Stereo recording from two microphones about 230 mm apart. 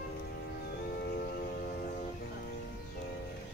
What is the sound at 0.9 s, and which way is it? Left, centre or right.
Music, left.